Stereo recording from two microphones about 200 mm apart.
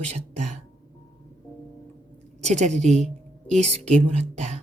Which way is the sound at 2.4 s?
35° right (ahead or behind).